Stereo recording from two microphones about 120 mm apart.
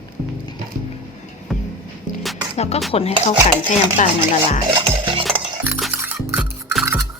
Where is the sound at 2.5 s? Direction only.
65° left (ahead or behind).